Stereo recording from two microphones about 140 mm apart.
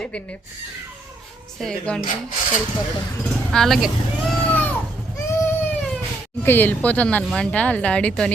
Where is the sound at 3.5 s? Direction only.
Centre (ahead or behind).